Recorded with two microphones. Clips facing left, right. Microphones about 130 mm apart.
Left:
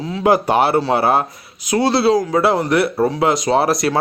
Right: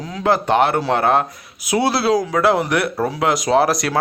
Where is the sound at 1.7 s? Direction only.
10° right (ahead or behind).